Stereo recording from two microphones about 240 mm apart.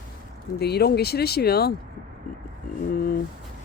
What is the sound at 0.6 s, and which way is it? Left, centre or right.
Speech, left.